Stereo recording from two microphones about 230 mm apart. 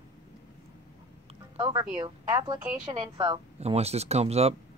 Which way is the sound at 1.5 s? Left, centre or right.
Centre.